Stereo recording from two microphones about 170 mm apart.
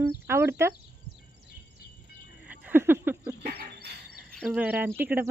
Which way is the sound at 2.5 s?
10° right (ahead or behind).